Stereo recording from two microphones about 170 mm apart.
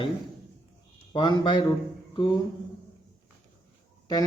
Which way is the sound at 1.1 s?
30° left (ahead or behind).